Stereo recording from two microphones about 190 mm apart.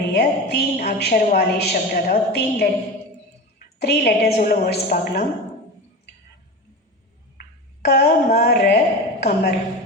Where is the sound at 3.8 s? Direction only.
55° left (ahead or behind).